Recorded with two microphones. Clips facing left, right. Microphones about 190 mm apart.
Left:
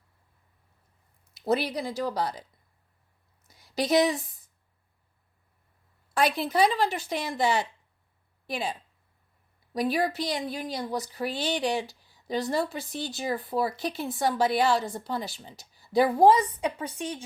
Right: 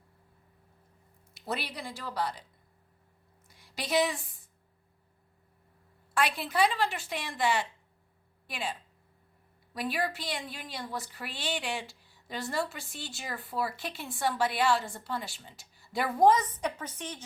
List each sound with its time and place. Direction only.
1.5 s speech: 40° left (ahead or behind)
3.4 s a sound: 40° left (ahead or behind)
6.1 s speech: 40° left (ahead or behind)
9.7 s speech: 40° left (ahead or behind)
16.8 s a woman's voice: 10° left (ahead or behind)